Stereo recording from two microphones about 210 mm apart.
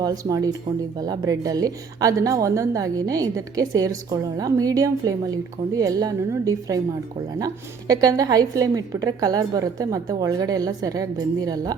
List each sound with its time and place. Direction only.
0.0 s a woman's voice: 15° right (ahead or behind)